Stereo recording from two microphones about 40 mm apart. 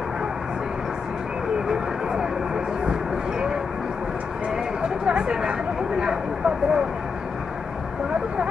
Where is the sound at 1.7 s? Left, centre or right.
Centre.